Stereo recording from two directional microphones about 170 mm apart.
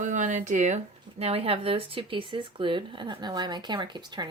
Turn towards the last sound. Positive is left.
turn(degrees=-25)  # may be behind; listen again after turning